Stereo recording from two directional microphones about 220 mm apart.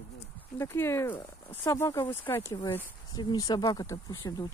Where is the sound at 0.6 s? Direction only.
10° left (ahead or behind).